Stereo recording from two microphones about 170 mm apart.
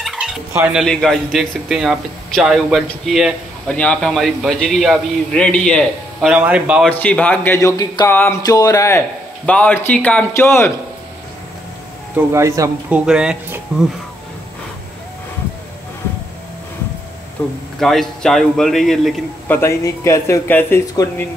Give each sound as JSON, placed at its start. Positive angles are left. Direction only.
{"t": 0.0, "sound": "fowl", "side_deg": 0}
{"t": 0.7, "sound": "a man's voice", "side_deg": 0}
{"t": 6.9, "sound": "speech", "side_deg": 10}
{"t": 12.3, "sound": "speech", "side_deg": -15}
{"t": 13.0, "sound": "a man's voice", "side_deg": -5}
{"t": 17.7, "sound": "a man's voice", "side_deg": 0}
{"t": 19.5, "sound": "speech", "side_deg": 15}